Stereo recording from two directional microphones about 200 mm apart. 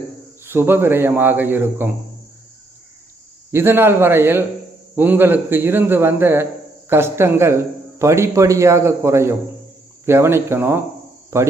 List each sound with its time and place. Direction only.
0.4 s a man's voice: 10° right (ahead or behind)
3.5 s a man's voice: 10° right (ahead or behind)